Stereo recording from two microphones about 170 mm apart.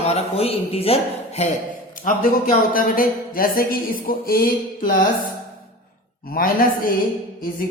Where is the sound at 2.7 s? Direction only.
55° left (ahead or behind).